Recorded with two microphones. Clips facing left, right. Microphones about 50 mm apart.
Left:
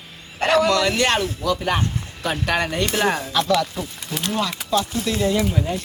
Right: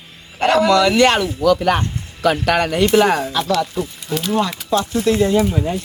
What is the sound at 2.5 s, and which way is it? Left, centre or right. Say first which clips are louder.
Speech: right 2 dB; right.